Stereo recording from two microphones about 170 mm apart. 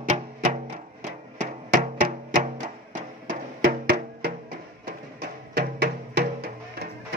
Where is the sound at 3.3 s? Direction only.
60° right (ahead or behind).